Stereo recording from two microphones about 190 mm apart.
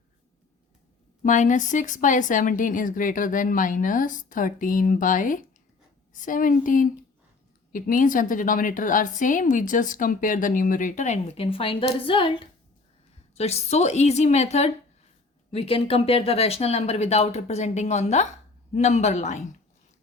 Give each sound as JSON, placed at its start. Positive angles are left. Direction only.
{"t": 1.2, "sound": "a woman's voice", "side_deg": 40}